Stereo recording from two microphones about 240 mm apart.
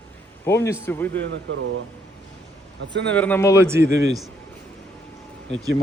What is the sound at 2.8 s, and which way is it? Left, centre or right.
Speech, right.